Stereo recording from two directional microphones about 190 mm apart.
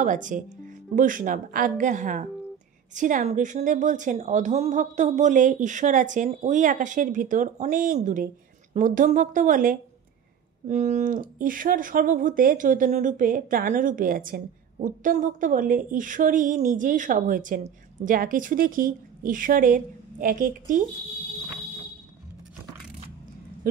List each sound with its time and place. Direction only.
0.0 s a woman's voice: 40° right (ahead or behind)